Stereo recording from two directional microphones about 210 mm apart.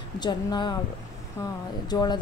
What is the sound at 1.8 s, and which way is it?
Speech, 20° left (ahead or behind).